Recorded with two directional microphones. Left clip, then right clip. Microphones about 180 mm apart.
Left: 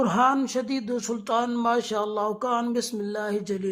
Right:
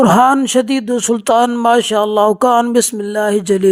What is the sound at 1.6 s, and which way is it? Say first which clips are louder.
Mantra: right 13 dB; 40° right (ahead or behind).